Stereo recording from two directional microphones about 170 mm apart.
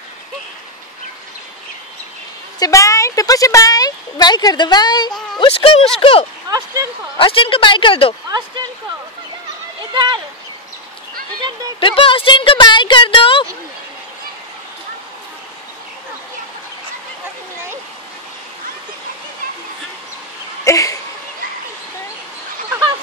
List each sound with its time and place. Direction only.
2.6 s a woman's voice: 20° left (ahead or behind)
6.5 s speech: 20° right (ahead or behind)
7.2 s a woman's voice: 30° left (ahead or behind)
9.9 s speech: 25° right (ahead or behind)
11.8 s speech: 30° left (ahead or behind)
20.6 s a sound: 20° left (ahead or behind)